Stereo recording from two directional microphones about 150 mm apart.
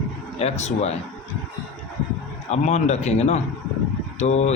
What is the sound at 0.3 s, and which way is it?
Speech, 45° left (ahead or behind).